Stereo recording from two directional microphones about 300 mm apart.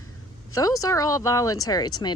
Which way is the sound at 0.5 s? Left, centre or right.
Centre.